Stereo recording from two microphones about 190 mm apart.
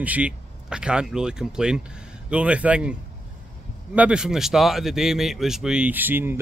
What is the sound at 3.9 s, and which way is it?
Speech, 5° right (ahead or behind).